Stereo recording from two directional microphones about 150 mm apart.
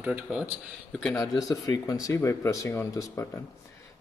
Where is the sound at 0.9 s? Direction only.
5° left (ahead or behind).